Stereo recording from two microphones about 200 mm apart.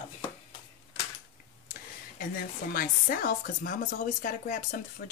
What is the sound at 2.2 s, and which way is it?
Speech, 45° left (ahead or behind).